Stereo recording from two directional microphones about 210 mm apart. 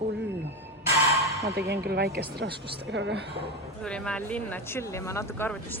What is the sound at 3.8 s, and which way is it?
Speech, 5° left (ahead or behind).